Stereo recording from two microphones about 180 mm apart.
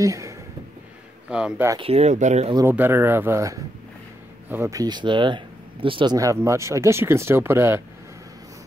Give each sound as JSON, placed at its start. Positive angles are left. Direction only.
{"t": 0.0, "sound": "speech", "side_deg": -15}
{"t": 1.3, "sound": "speech", "side_deg": -5}
{"t": 1.8, "sound": "speech", "side_deg": -35}
{"t": 2.5, "sound": "speech", "side_deg": -10}